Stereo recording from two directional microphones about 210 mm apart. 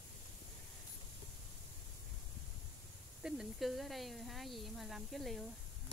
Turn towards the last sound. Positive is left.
turn(degrees=0)  # may be behind; listen again after turning